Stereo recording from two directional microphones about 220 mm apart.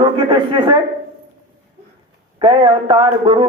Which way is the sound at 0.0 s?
20° right (ahead or behind).